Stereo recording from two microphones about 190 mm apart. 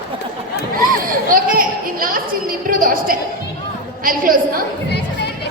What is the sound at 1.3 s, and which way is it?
A woman's voice, 50° right (ahead or behind).